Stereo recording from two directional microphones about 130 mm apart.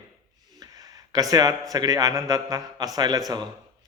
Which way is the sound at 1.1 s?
30° right (ahead or behind).